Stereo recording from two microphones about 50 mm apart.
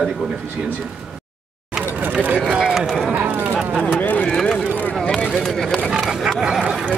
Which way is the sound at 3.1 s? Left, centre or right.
Right.